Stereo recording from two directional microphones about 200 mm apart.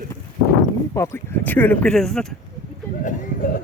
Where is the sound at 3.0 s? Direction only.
40° left (ahead or behind).